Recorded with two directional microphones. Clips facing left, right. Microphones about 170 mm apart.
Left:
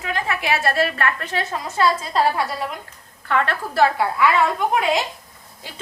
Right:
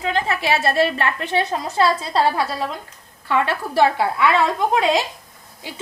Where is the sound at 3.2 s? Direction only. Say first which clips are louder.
Right 1 dB; 15° right (ahead or behind).